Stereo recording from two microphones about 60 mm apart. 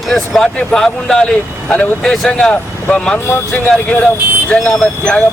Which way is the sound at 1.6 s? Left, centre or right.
Left.